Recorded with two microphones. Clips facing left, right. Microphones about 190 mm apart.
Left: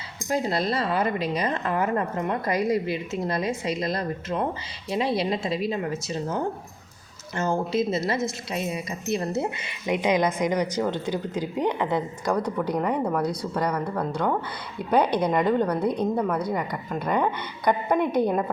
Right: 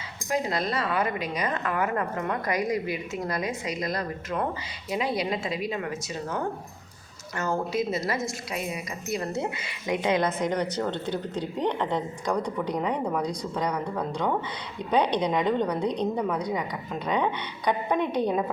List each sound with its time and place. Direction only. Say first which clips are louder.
0.3 s a woman's voice: left 2 dB; 30° left (ahead or behind)
7.3 s a woman's voice: left 3 dB; 25° left (ahead or behind); by 13.1 s 5° left (ahead or behind)
13.1 s a woman's voice: left 3 dB; 15° right (ahead or behind)
13.5 s a woman's voice: left 2 dB; 5° left (ahead or behind)
16.1 s a woman's voice: left 2 dB; 15° right (ahead or behind)
16.6 s a woman's voice: left 2 dB; 5° left (ahead or behind)